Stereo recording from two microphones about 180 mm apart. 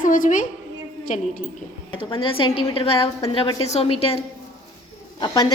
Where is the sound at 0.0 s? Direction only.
45° left (ahead or behind).